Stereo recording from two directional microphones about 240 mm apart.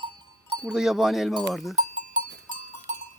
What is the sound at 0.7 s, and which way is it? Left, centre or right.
Speech, centre.